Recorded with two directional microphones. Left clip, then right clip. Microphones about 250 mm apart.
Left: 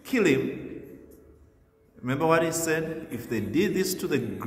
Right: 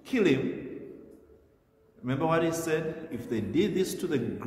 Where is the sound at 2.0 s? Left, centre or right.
Left.